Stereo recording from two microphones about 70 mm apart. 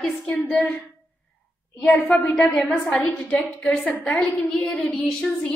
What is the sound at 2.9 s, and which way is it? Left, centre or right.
A woman's voice, centre.